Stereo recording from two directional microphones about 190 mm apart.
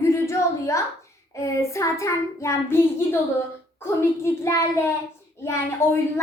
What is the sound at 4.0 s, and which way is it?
A child's voice, 15° left (ahead or behind).